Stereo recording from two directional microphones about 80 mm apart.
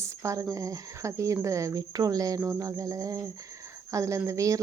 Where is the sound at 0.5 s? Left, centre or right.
Right.